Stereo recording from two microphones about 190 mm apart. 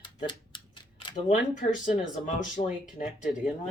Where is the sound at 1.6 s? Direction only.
40° left (ahead or behind).